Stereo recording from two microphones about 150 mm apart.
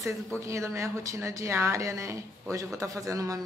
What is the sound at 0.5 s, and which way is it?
Speech, 20° right (ahead or behind).